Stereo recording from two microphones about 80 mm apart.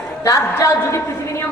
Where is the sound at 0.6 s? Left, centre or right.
Left.